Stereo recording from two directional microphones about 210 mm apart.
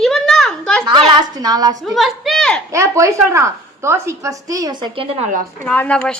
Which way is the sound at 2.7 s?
15° right (ahead or behind).